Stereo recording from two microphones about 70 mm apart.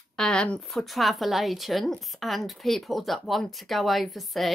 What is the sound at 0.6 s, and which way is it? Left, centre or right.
A woman's voice, centre.